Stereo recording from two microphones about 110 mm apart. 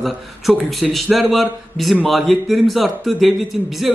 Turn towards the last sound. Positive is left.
turn(degrees=0)  # may be behind; listen again after turning